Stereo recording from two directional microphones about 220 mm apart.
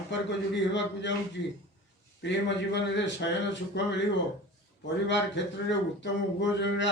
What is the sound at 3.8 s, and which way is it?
Speech, 50° left (ahead or behind).